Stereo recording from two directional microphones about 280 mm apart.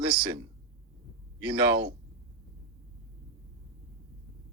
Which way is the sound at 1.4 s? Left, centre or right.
Centre.